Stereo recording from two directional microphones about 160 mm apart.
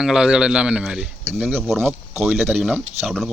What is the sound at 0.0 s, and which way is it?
Speech, 5° right (ahead or behind).